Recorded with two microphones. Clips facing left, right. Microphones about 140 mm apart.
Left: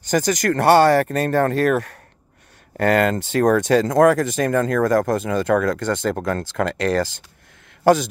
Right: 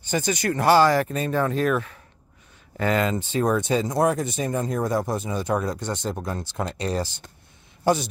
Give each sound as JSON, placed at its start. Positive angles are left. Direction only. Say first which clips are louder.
{"t": 0.1, "sound": "speech", "louder": "left 5 dB", "side_deg": 90}